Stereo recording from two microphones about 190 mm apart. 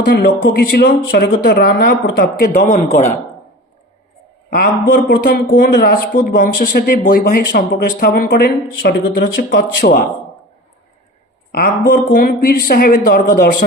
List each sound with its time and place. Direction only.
0.0 s speech: 60° left (ahead or behind)
2.6 s a man's voice: 35° left (ahead or behind)
4.5 s speech: 55° left (ahead or behind)
6.2 s speech: 50° left (ahead or behind)
11.5 s speech: 50° left (ahead or behind)